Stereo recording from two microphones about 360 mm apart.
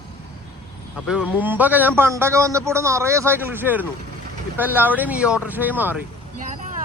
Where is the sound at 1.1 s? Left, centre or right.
Centre.